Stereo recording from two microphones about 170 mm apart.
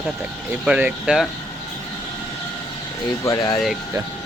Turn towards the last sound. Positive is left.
turn(degrees=20)  # may be behind; listen again after turning